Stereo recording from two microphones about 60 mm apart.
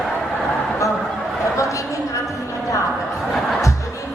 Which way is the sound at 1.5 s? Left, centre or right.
Left.